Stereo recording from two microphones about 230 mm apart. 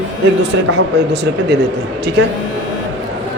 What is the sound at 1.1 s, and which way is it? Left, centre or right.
Speech, right.